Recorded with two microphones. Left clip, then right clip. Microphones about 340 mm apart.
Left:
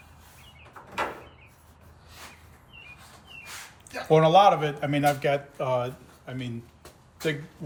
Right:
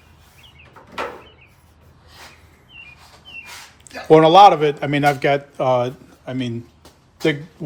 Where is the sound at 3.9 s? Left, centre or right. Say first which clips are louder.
Right 8 dB; centre.